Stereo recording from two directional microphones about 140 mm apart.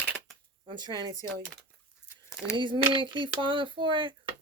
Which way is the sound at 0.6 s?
30° right (ahead or behind).